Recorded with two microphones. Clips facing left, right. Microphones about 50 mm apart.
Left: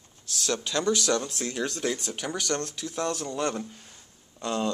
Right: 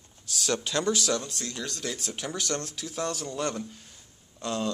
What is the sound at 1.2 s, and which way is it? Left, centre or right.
Speech, centre.